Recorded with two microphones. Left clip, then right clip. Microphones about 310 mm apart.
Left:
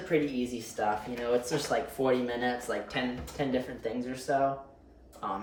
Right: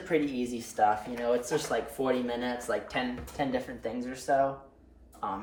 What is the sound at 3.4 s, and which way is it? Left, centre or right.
Speech, centre.